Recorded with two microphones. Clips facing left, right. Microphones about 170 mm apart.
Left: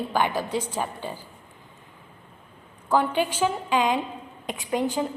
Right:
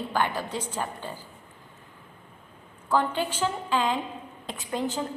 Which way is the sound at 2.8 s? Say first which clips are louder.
Left 3 dB; 10° left (ahead or behind).